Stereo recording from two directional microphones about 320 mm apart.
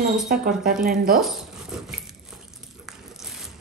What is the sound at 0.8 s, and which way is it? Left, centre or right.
Speech, right.